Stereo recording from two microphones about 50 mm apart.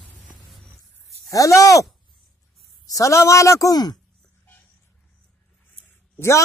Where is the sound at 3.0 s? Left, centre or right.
Left.